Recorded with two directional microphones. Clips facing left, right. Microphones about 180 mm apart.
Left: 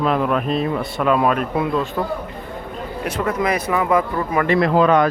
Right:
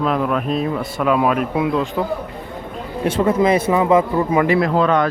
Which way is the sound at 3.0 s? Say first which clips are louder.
Right 6 dB; 25° right (ahead or behind).